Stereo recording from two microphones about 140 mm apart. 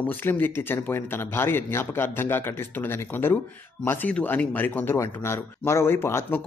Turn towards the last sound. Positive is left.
turn(degrees=15)  # may be behind; listen again after turning